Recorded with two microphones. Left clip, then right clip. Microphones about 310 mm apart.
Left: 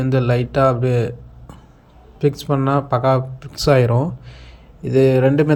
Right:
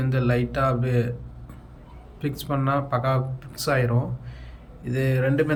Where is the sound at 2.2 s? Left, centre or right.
Centre.